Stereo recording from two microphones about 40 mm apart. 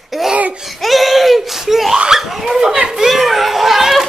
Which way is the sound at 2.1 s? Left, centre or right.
Centre.